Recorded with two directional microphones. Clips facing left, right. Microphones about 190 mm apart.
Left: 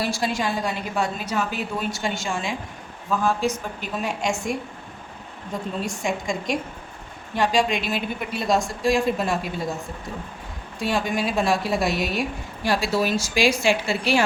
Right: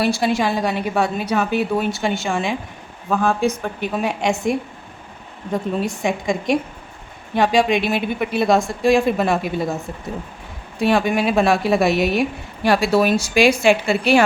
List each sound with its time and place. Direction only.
0.0 s a woman's voice: 65° right (ahead or behind)
5.8 s a woman's voice: 60° right (ahead or behind)
10.8 s a woman's voice: 60° right (ahead or behind)